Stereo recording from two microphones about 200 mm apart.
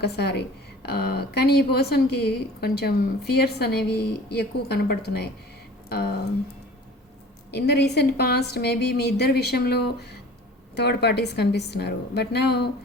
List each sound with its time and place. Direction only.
0.0 s a woman's voice: 55° left (ahead or behind)
7.8 s a woman's voice: 55° left (ahead or behind)